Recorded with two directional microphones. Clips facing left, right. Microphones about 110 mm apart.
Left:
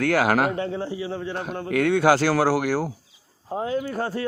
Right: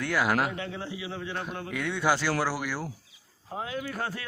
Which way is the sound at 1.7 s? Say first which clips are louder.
Left 9 dB; 85° left.